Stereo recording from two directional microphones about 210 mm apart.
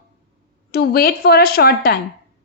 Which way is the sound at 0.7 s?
45° left (ahead or behind).